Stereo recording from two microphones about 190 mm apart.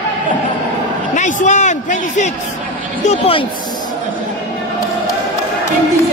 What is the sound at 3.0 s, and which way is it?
Speech, 30° left (ahead or behind).